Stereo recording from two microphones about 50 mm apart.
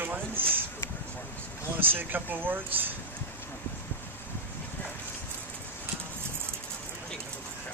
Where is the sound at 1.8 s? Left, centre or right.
Right.